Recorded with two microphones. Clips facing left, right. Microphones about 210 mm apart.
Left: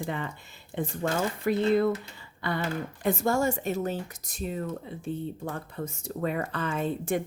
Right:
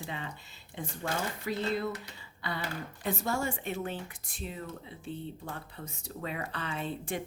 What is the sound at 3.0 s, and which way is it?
Speech, 45° left (ahead or behind).